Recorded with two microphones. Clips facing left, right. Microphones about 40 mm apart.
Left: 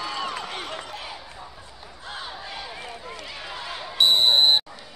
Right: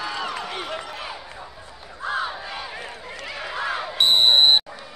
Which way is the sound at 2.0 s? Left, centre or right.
Right.